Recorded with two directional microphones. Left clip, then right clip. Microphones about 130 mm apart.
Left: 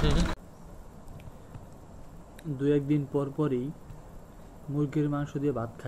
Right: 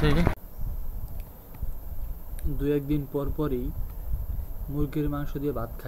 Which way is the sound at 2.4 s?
Centre (ahead or behind).